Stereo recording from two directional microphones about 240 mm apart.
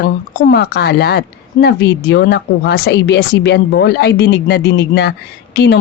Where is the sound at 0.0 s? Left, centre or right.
Left.